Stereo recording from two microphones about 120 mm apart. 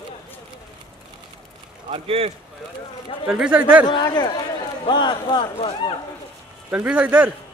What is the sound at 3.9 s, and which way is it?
A man's voice, 40° left (ahead or behind).